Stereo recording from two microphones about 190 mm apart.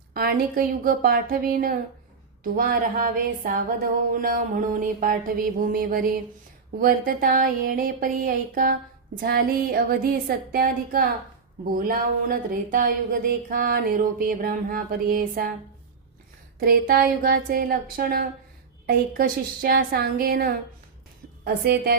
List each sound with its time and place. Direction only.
0.1 s speech: 50° right (ahead or behind)
16.6 s speech: 50° right (ahead or behind)